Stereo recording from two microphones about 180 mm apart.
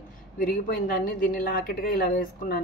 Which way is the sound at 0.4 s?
50° left (ahead or behind).